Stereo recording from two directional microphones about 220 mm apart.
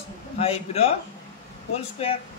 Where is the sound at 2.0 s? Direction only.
25° left (ahead or behind).